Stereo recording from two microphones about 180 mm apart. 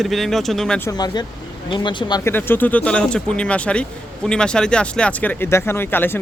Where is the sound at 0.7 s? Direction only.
20° left (ahead or behind).